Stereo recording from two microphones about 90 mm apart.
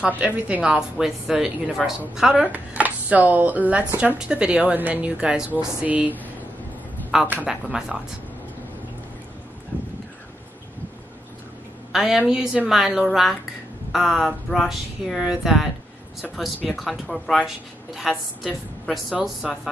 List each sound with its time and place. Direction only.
0.0 s a woman's voice: 10° right (ahead or behind)
2.4 s a woman's voice: 15° right (ahead or behind)
7.4 s a woman's voice: 5° right (ahead or behind)
11.9 s speech: 5° right (ahead or behind)